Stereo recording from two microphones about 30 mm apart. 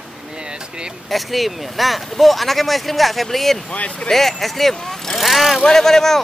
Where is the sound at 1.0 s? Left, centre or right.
Centre.